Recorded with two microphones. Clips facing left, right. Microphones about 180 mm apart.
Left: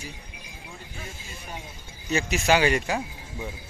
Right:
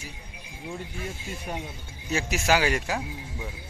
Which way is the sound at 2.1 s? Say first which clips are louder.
Left 2 dB; 5° right (ahead or behind).